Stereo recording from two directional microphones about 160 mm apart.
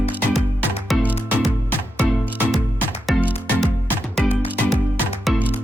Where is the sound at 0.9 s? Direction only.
Centre (ahead or behind).